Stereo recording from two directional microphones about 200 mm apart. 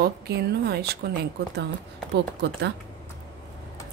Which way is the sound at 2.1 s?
60° right (ahead or behind).